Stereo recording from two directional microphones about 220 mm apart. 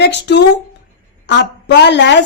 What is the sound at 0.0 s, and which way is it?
Speech, 50° left (ahead or behind).